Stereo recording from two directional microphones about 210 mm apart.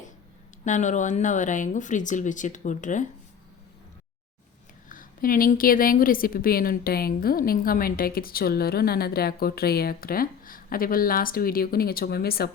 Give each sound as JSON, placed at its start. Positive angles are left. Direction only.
{"t": 0.6, "sound": "speech", "side_deg": 35}
{"t": 4.9, "sound": "a woman's voice", "side_deg": 40}